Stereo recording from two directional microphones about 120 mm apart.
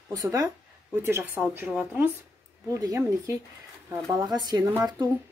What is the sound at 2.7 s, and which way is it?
Speech, 25° right (ahead or behind).